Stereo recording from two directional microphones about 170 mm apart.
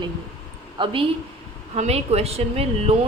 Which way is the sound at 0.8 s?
30° right (ahead or behind).